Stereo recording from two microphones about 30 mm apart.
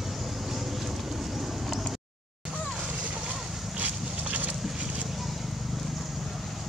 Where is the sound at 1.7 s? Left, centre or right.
Centre.